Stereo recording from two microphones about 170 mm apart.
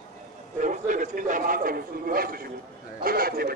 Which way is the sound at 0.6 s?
50° right (ahead or behind).